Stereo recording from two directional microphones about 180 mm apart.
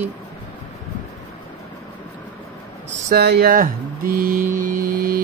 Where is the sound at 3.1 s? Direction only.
60° right (ahead or behind).